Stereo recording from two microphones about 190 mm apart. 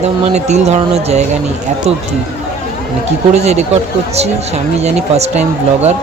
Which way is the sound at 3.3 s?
35° right (ahead or behind).